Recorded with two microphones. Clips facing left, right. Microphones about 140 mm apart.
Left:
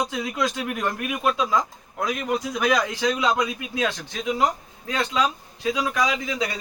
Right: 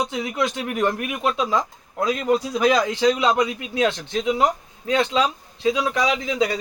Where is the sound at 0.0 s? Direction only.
25° right (ahead or behind).